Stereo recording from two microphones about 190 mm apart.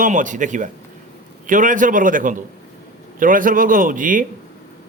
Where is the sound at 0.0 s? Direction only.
40° right (ahead or behind).